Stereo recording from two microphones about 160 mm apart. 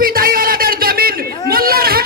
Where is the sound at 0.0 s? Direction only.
65° right (ahead or behind).